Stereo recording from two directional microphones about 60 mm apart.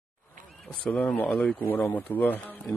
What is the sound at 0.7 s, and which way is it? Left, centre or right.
Speech, centre.